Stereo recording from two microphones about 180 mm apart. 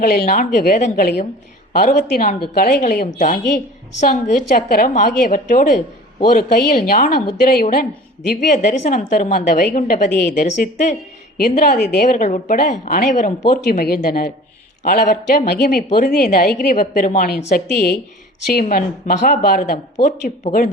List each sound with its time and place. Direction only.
0.0 s a woman's voice: 50° left (ahead or behind)
18.6 s a woman's voice: 45° left (ahead or behind)